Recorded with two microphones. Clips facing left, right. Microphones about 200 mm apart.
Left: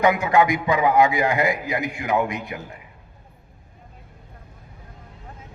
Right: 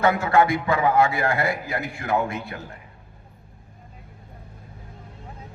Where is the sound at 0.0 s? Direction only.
15° left (ahead or behind).